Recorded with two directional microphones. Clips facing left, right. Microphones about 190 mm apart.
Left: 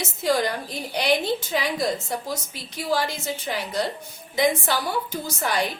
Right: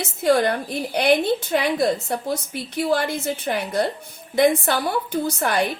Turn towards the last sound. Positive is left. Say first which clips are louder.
# right 4 dB
turn(degrees=-55)  # may be behind; listen again after turning